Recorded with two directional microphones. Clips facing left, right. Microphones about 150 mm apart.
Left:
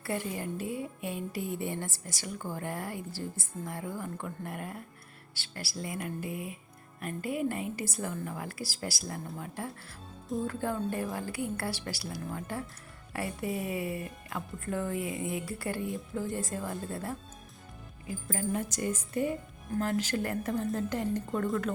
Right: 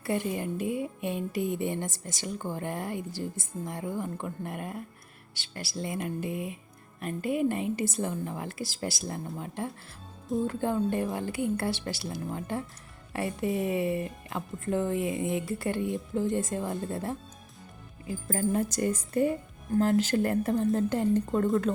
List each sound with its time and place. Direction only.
0.0 s a woman's voice: 20° right (ahead or behind)
18.3 s speech: 35° right (ahead or behind)
19.8 s a woman's voice: 25° right (ahead or behind)